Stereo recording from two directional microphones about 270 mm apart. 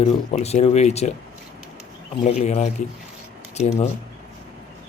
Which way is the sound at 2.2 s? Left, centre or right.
Left.